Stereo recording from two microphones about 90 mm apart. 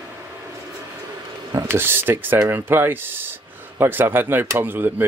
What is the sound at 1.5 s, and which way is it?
A man's voice, 25° right (ahead or behind).